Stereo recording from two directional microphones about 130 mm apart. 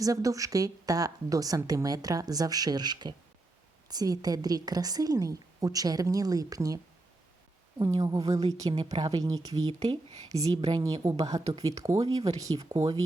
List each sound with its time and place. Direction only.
0.0 s a woman's voice: 25° right (ahead or behind)
7.8 s a woman's voice: 30° right (ahead or behind)